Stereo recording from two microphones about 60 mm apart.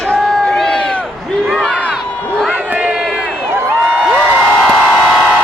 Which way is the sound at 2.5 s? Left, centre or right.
Right.